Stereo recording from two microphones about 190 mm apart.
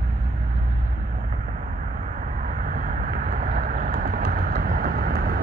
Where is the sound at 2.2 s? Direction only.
45° right (ahead or behind).